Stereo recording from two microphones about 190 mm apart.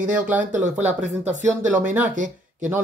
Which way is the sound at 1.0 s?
40° right (ahead or behind).